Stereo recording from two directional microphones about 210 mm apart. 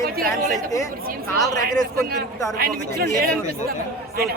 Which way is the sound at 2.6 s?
45° right (ahead or behind).